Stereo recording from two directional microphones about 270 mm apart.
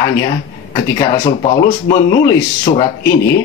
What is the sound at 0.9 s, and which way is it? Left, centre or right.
A man's voice, centre.